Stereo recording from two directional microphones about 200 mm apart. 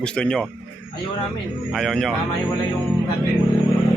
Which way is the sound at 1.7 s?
Centre (ahead or behind).